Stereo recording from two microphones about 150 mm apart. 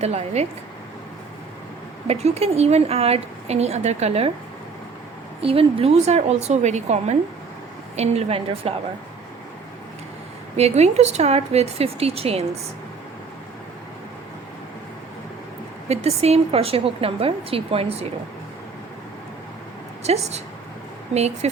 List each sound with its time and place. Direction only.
0.0 s a woman's voice: 45° right (ahead or behind)
2.0 s a woman's voice: 45° right (ahead or behind)
5.4 s a woman's voice: 40° right (ahead or behind)
10.6 s a woman's voice: 45° right (ahead or behind)
15.9 s a woman's voice: 45° right (ahead or behind)
20.1 s a woman's voice: 45° right (ahead or behind)